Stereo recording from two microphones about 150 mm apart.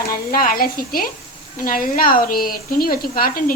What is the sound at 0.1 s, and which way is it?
Speech, 75° left (ahead or behind).